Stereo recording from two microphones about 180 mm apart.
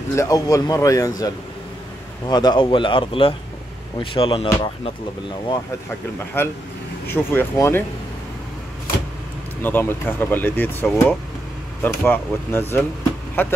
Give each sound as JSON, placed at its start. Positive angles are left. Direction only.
{"t": 0.1, "sound": "speech", "side_deg": 15}
{"t": 6.4, "sound": "speech", "side_deg": 10}
{"t": 9.6, "sound": "speech", "side_deg": 10}